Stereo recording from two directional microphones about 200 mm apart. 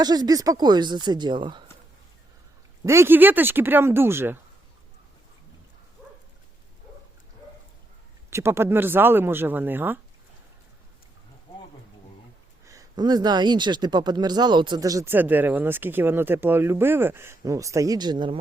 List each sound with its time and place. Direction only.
0.0 s speech: 20° right (ahead or behind)
2.8 s speech: 15° right (ahead or behind)
8.3 s speech: 15° right (ahead or behind)
12.6 s speech: 15° right (ahead or behind)